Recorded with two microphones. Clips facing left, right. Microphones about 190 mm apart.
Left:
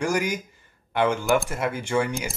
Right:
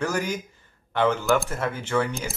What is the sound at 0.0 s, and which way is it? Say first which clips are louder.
Speech: left 2 dB; 10° left (ahead or behind).